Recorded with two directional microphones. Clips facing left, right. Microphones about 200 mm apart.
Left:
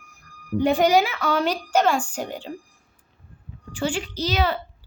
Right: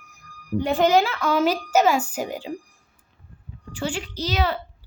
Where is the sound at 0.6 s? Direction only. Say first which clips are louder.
Even; 15° left (ahead or behind).